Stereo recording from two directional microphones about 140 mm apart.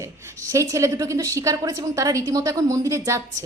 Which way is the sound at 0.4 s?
25° right (ahead or behind).